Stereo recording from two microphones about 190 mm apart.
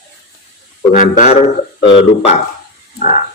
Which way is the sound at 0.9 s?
40° left (ahead or behind).